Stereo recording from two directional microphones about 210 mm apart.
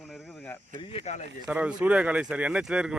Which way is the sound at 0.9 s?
30° left (ahead or behind).